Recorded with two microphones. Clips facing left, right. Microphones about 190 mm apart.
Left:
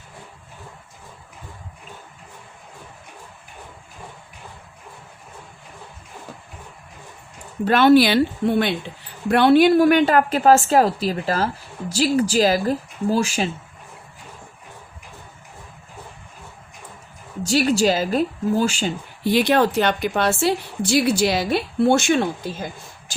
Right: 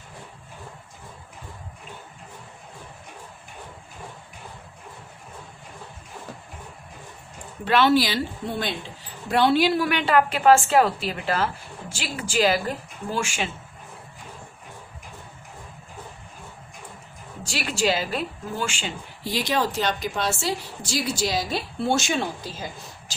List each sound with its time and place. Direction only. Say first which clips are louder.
7.6 s a woman's voice: left 6 dB; 50° left (ahead or behind)
17.4 s a woman's voice: left 8 dB; 40° left (ahead or behind)
19.2 s a woman's voice: left 8 dB; 60° left (ahead or behind)